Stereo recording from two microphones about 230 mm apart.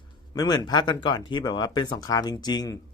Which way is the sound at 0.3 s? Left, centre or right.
Centre.